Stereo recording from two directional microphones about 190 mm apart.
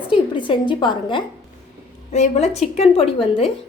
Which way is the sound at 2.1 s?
35° left (ahead or behind).